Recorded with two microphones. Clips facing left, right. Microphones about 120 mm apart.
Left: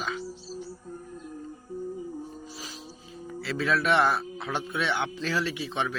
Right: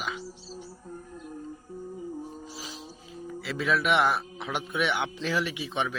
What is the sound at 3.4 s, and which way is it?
A man's voice, 15° right (ahead or behind).